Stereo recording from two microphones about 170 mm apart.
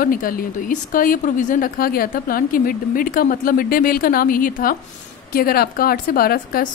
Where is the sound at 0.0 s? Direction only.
55° left (ahead or behind).